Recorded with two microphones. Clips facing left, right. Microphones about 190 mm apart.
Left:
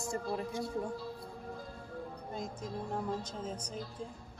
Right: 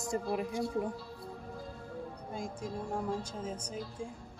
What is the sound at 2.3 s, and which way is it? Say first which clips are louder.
Speech: right 1 dB; 10° right (ahead or behind).